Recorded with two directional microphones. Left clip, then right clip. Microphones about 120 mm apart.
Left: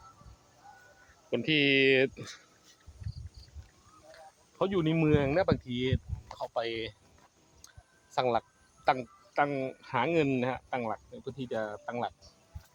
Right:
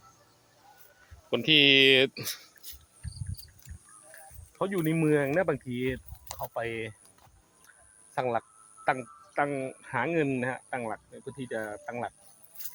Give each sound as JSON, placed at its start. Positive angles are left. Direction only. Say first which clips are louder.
{"t": 1.3, "sound": "speech", "louder": "right 6 dB", "side_deg": -10}
{"t": 4.5, "sound": "speech", "louder": "even", "side_deg": 15}
{"t": 8.1, "sound": "speech", "louder": "left 1 dB", "side_deg": 25}